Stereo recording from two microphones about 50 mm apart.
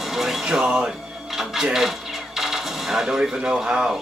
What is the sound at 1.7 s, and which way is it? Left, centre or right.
Coin, centre.